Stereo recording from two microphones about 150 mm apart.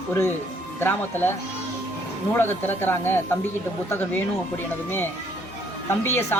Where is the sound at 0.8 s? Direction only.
15° left (ahead or behind).